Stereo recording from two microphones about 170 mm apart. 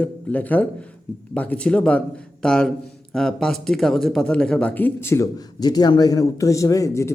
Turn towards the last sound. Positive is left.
turn(degrees=20)  # may be behind; listen again after turning